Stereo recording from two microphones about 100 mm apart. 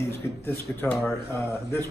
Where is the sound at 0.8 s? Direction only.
10° left (ahead or behind).